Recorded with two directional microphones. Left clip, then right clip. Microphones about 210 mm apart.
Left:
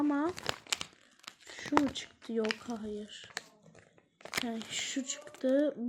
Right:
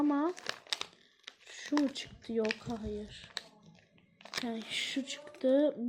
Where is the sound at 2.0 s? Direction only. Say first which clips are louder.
Even; 20° left (ahead or behind).